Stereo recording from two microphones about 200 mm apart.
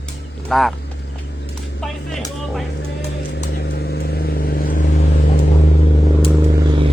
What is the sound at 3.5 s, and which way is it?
Vehicle, 55° left (ahead or behind).